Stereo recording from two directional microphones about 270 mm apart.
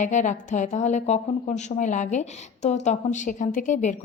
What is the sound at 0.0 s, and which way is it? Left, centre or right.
A woman's voice, left.